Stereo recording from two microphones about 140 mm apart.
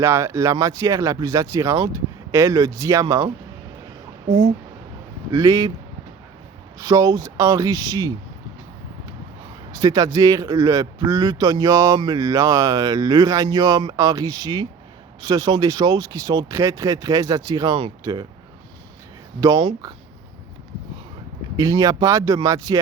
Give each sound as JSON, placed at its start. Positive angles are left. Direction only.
{"t": 0.0, "sound": "a man's voice", "side_deg": -20}
{"t": 5.3, "sound": "a man's voice", "side_deg": -25}
{"t": 6.7, "sound": "a man's voice", "side_deg": -25}
{"t": 9.7, "sound": "a man's voice", "side_deg": -25}
{"t": 19.4, "sound": "a man's voice", "side_deg": -25}
{"t": 21.5, "sound": "a man's voice", "side_deg": -25}